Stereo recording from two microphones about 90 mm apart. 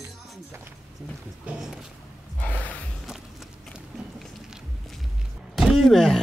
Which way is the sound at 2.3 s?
15° left (ahead or behind).